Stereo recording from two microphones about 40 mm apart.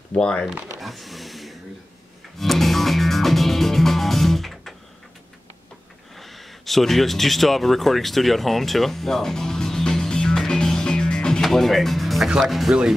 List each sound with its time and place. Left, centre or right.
0.2 s speech: left
0.7 s a sound: centre
2.3 s music: centre
6.1 s a sound: centre; by 11.4 s left
11.4 s music: centre
12.4 s speech: centre